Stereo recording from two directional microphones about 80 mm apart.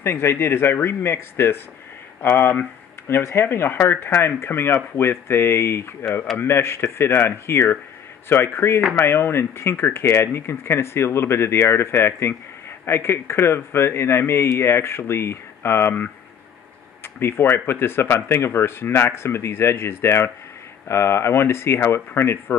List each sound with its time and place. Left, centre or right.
0.0 s speech: left